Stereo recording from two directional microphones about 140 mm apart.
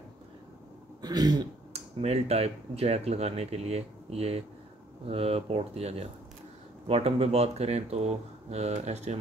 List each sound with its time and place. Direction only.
1.0 s speech: 30° right (ahead or behind)
1.7 s speech: 50° right (ahead or behind)